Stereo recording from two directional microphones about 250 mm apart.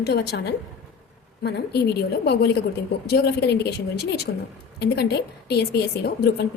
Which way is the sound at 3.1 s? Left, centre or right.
Left.